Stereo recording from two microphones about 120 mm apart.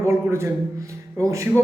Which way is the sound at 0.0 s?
20° right (ahead or behind).